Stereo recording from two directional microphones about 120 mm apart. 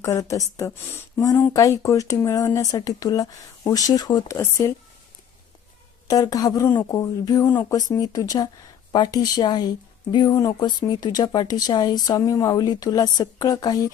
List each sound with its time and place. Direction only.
0.0 s speech: 25° left (ahead or behind)
6.1 s speech: 30° left (ahead or behind)